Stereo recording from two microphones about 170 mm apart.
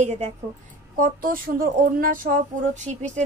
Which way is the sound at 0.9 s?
55° right (ahead or behind).